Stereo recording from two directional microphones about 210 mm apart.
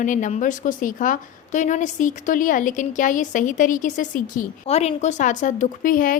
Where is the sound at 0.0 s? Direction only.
35° left (ahead or behind).